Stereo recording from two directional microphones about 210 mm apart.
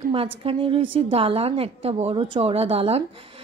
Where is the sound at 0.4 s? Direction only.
25° right (ahead or behind).